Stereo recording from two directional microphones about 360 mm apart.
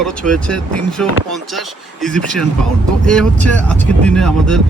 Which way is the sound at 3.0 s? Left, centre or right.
Centre.